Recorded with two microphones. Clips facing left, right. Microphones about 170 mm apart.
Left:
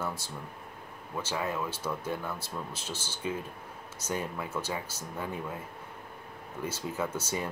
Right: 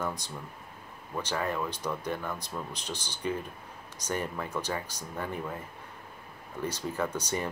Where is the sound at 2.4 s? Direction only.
15° right (ahead or behind).